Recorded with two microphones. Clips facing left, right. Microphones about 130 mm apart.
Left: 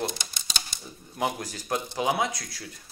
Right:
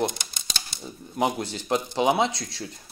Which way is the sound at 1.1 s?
25° right (ahead or behind).